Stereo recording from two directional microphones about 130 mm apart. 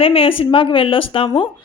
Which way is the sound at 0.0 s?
45° left (ahead or behind).